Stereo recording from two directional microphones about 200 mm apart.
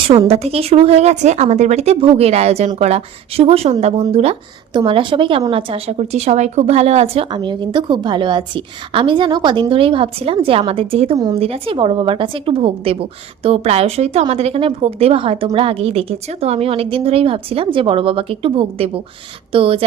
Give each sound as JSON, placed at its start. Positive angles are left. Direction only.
{"t": 0.1, "sound": "a woman's voice", "side_deg": -30}